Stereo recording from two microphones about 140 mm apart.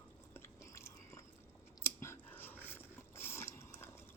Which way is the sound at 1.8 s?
20° left (ahead or behind).